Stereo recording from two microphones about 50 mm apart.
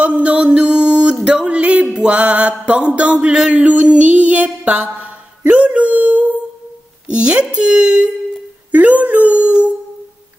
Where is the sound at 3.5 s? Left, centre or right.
Right.